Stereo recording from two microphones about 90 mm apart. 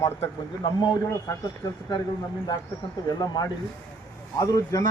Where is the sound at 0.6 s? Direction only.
55° left (ahead or behind).